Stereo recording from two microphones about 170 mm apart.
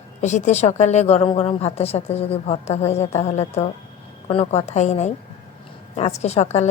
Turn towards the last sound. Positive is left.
turn(degrees=40)  # may be behind; listen again after turning